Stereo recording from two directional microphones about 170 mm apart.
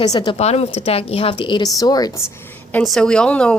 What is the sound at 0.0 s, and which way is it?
Speech, 25° left (ahead or behind).